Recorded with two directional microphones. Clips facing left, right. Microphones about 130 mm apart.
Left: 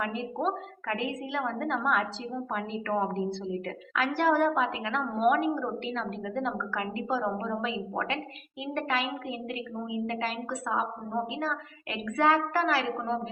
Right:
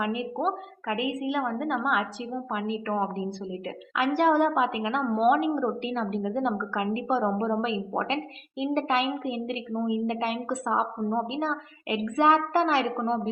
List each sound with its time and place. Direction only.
0.0 s a woman's voice: 10° right (ahead or behind)